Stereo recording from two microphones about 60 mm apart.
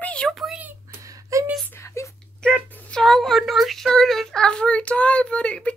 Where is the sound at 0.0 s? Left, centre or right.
Left.